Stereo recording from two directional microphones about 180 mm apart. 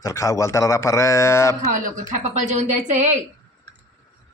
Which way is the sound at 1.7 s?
45° right (ahead or behind).